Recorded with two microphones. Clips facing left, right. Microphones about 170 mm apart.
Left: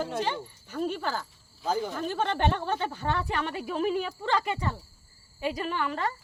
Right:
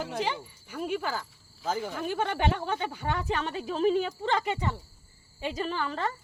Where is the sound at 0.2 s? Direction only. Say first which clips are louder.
Left 1 dB; 10° right (ahead or behind).